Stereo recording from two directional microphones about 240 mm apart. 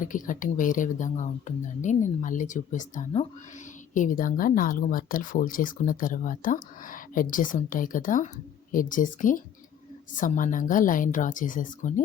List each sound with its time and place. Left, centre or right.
0.0 s speech: left